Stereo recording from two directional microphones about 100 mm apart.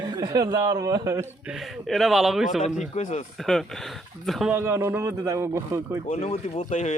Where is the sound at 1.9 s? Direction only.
Centre (ahead or behind).